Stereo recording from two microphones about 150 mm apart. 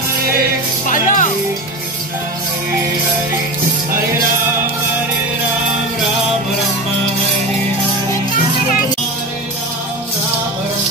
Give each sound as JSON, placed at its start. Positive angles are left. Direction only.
{"t": 0.8, "sound": "music", "side_deg": 60}